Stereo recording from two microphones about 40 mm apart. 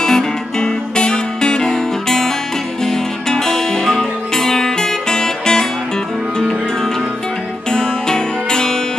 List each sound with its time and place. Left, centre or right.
0.0 s music: centre
7.7 s music: centre